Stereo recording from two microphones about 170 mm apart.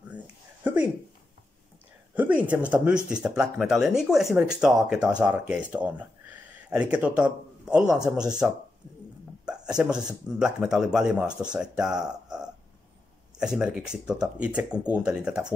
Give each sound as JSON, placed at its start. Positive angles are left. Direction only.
{"t": 2.1, "sound": "speech", "side_deg": -10}